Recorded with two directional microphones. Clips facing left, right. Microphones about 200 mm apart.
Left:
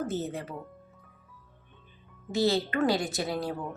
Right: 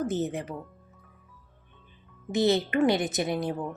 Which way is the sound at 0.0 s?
15° right (ahead or behind).